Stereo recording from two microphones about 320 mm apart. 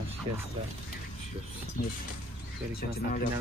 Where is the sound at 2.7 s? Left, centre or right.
Left.